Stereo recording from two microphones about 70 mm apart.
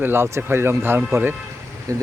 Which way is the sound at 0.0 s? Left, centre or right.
Right.